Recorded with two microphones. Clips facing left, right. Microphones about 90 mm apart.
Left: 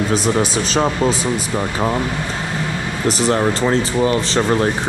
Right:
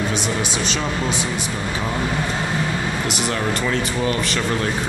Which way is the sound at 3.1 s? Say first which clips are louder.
Left 10 dB; 35° left (ahead or behind).